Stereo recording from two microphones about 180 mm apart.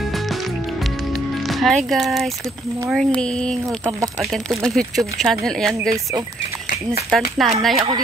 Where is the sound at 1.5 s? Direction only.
Centre (ahead or behind).